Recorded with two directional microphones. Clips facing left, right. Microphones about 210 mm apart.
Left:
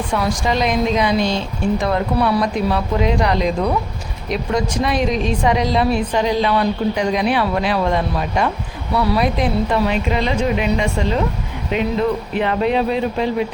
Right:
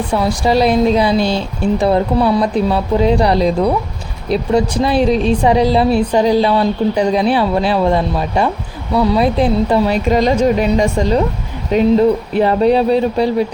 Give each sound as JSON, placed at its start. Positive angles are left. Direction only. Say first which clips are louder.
{"t": 0.1, "sound": "a woman's voice", "louder": "right 5 dB", "side_deg": -35}